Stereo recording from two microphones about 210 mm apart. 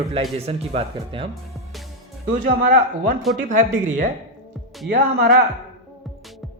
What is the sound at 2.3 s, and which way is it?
A man's voice, 40° right (ahead or behind).